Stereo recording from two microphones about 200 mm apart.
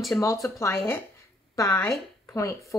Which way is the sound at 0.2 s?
15° left (ahead or behind).